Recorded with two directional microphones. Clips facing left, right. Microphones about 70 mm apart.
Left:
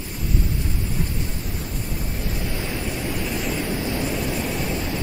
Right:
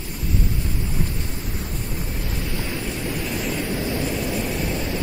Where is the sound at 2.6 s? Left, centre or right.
Centre.